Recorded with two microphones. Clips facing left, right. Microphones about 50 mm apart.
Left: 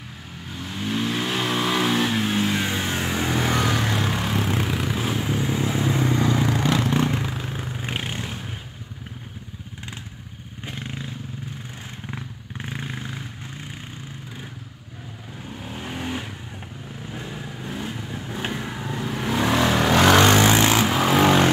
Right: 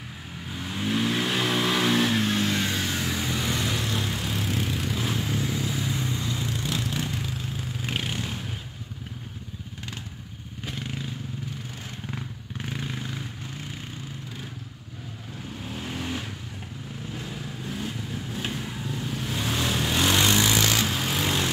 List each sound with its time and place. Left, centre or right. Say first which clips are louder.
0.5 s vehicle: even; centre; by 3.8 s left
3.8 s vehicle: left 5 dB; left
4.2 s vehicle: left 5 dB; left
5.2 s vehicle: left 4 dB; left
6.1 s vehicle: left 9 dB; left
7.8 s vehicle: even; left
10.6 s motorcycle: left 1 dB; left
12.1 s vehicle: left 1 dB; centre
15.6 s vehicle: left 2 dB; centre; by 18.9 s left
18.9 s vehicle: left 9 dB; left
20.2 s vehicle: left 6 dB; left
20.9 s vehicle: left 9 dB; left